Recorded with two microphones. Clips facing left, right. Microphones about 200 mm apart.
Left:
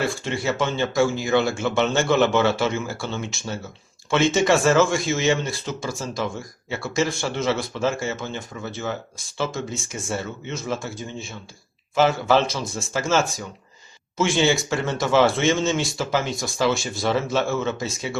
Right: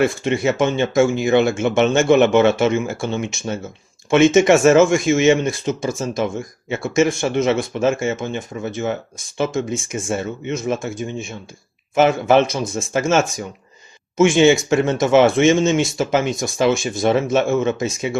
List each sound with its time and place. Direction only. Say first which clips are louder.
0.0 s speech: right 7 dB; 20° right (ahead or behind)